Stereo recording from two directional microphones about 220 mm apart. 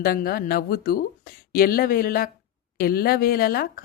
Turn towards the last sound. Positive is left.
turn(degrees=45)  # may be behind; listen again after turning